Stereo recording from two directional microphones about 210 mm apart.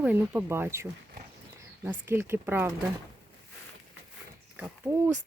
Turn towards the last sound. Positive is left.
turn(degrees=-10)  # may be behind; listen again after turning